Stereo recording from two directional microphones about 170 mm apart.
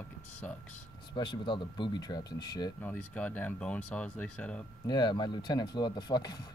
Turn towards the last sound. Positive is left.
turn(degrees=25)  # may be behind; listen again after turning